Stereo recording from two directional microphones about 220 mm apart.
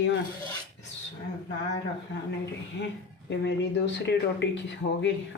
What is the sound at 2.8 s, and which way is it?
Speech, 50° left (ahead or behind).